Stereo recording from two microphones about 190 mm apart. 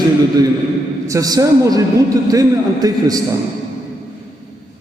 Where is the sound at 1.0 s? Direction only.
20° right (ahead or behind).